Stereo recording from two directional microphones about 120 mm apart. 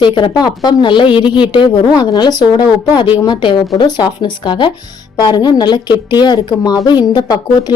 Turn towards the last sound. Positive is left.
turn(degrees=35)  # may be behind; listen again after turning